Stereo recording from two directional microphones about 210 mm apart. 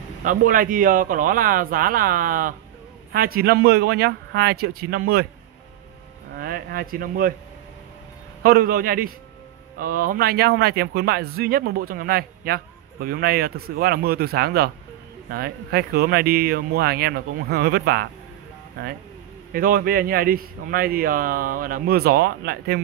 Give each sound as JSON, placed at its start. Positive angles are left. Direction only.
{"t": 0.2, "sound": "speech", "side_deg": -40}
{"t": 6.3, "sound": "speech", "side_deg": -45}
{"t": 8.4, "sound": "speech", "side_deg": -45}
{"t": 19.5, "sound": "speech", "side_deg": -45}